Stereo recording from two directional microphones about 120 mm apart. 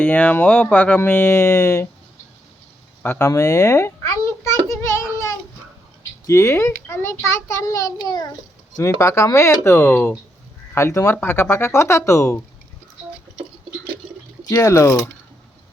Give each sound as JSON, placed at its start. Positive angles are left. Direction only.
{"t": 0.0, "sound": "speech", "side_deg": 10}
{"t": 3.0, "sound": "a sound", "side_deg": 20}
{"t": 6.0, "sound": "a child's voice", "side_deg": 25}
{"t": 14.4, "sound": "a child's voice", "side_deg": 25}